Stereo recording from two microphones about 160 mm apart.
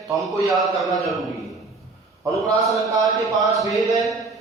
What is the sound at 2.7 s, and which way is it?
Speech, 20° right (ahead or behind).